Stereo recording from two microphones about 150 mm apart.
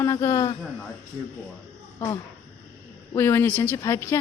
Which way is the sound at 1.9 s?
20° left (ahead or behind).